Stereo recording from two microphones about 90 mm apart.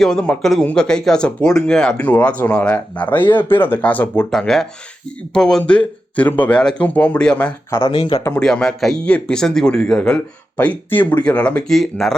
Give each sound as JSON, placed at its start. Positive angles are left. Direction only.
{"t": 0.0, "sound": "speech", "side_deg": 10}
{"t": 4.3, "sound": "speech", "side_deg": 5}
{"t": 7.9, "sound": "speech", "side_deg": 55}
{"t": 8.3, "sound": "speech", "side_deg": 10}
{"t": 10.6, "sound": "speech", "side_deg": 20}